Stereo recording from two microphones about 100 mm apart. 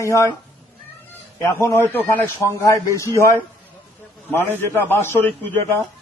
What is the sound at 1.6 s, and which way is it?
A man's voice, 20° left (ahead or behind).